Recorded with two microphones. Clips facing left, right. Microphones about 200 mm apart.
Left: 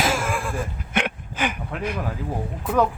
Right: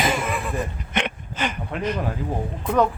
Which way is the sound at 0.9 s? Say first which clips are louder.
Left 1 dB; 10° left (ahead or behind).